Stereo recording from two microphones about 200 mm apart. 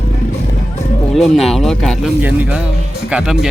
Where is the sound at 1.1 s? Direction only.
Centre (ahead or behind).